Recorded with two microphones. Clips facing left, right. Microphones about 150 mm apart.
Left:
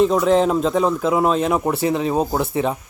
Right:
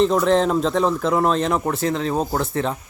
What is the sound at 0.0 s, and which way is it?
Speech, 5° left (ahead or behind).